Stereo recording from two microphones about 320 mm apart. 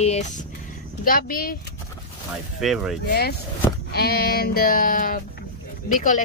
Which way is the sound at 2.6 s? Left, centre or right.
Centre.